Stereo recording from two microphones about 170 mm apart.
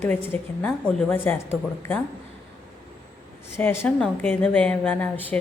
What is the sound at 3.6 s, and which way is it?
A woman's voice, 10° left (ahead or behind).